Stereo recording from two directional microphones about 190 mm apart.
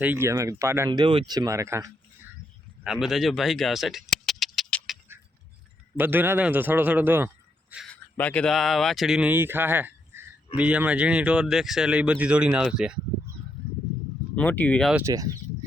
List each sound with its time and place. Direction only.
0.0 s a man's voice: 10° right (ahead or behind)
0.9 s a man's voice: 25° right (ahead or behind)
2.8 s a sound: 5° right (ahead or behind)
6.0 s a man's voice: 10° right (ahead or behind)
7.9 s speech: 5° left (ahead or behind)
14.3 s speech: 10° left (ahead or behind)
14.9 s a man's voice: 15° right (ahead or behind)